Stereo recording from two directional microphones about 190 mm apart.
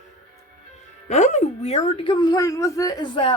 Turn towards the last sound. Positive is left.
turn(degrees=25)  # may be behind; listen again after turning